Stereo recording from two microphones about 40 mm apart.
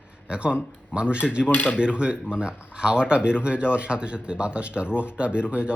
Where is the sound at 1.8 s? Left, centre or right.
Right.